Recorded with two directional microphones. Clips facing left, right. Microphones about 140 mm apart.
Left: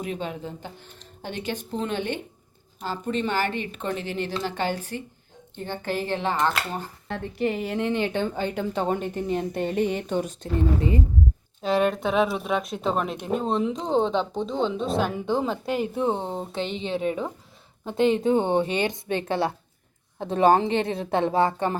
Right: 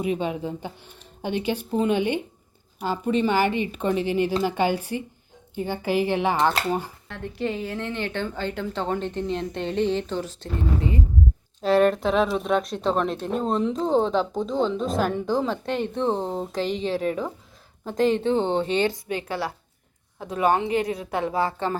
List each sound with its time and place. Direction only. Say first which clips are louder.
0.0 s a woman's voice: right 5 dB; 10° right (ahead or behind)
7.3 s a woman's voice: left 2 dB; 15° left (ahead or behind)
11.6 s speech: right 3 dB; centre (ahead or behind)
18.2 s a woman's voice: left 1 dB; 15° left (ahead or behind)
19.0 s a woman's voice: left 3 dB; 25° left (ahead or behind)